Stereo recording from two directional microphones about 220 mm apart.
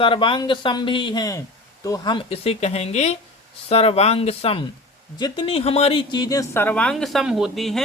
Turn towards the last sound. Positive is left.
turn(degrees=0)  # may be behind; listen again after turning